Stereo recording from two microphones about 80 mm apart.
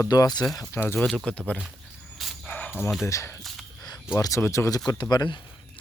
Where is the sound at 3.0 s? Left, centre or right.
Left.